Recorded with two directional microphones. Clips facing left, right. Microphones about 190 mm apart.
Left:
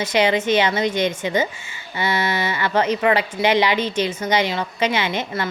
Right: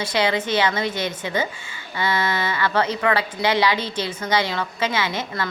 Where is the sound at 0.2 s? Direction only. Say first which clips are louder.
Left 3 dB; 15° left (ahead or behind).